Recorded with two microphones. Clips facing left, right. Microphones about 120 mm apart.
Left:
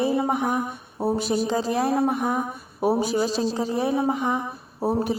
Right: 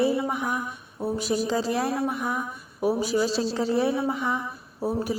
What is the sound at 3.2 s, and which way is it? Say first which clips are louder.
Speech: left 1 dB; 45° left (ahead or behind).